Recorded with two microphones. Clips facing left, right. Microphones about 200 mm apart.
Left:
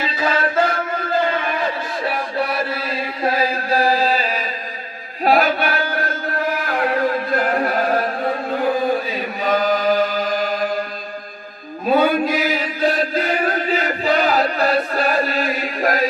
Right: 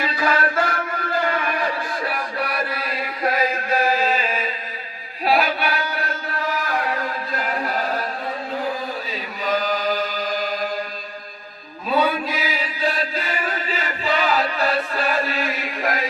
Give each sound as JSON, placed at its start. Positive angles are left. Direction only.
{"t": 0.0, "sound": "a sound", "side_deg": 25}
{"t": 5.2, "sound": "chant", "side_deg": 45}
{"t": 11.9, "sound": "chant", "side_deg": 50}